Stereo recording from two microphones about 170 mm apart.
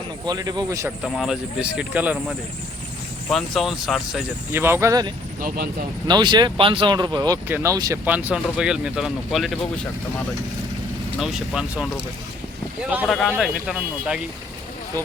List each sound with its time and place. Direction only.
0.3 s speech: 25° right (ahead or behind)
1.0 s speech: centre (ahead or behind); by 5.1 s 20° right (ahead or behind)
5.4 s speech: 55° right (ahead or behind)
6.1 s speech: 25° right (ahead or behind)
8.0 s speech: 10° right (ahead or behind)
11.2 s speech: 5° right (ahead or behind)